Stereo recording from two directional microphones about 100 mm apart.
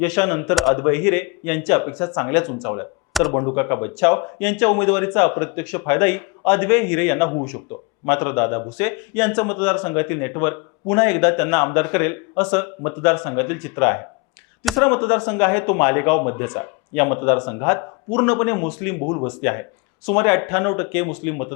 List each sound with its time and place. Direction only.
0.0 s speech: 15° left (ahead or behind)
0.5 s a man's voice: centre (ahead or behind)
0.8 s speech: 15° left (ahead or behind)
3.1 s speech: centre (ahead or behind)
3.3 s speech: 20° left (ahead or behind)
14.6 s speech: centre (ahead or behind)
14.8 s speech: 15° left (ahead or behind)